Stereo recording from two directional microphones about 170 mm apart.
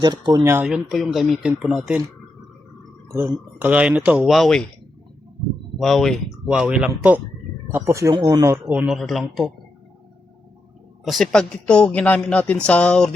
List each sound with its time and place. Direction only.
0.0 s speech: 25° right (ahead or behind)
0.5 s speech: 5° right (ahead or behind)
3.1 s speech: 15° right (ahead or behind); by 4.7 s 5° left (ahead or behind)
5.8 s speech: centre (ahead or behind)
11.0 s speech: centre (ahead or behind)